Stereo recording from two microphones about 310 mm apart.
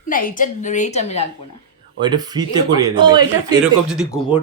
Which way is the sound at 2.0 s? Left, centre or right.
Centre.